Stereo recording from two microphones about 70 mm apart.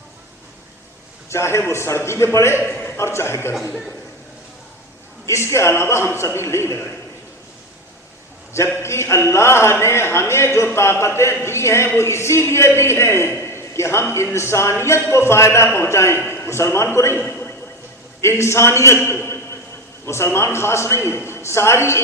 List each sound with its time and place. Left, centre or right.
1.3 s a man's voice: left
2.6 s a sound: left
3.0 s a man's voice: left
5.2 s a man's voice: left
8.8 s a man's voice: left
13.4 s a sound: left
14.3 s a man's voice: left
19.0 s a sound: left
20.1 s a man's voice: left